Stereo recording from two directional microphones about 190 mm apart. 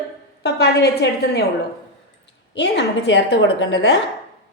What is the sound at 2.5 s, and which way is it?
Speech, 65° left (ahead or behind).